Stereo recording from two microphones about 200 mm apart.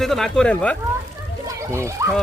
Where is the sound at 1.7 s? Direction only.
15° right (ahead or behind).